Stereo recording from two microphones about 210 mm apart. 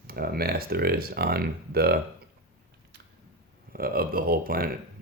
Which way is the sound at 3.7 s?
45° right (ahead or behind).